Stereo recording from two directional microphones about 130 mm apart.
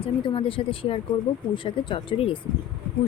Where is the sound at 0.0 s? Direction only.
45° left (ahead or behind).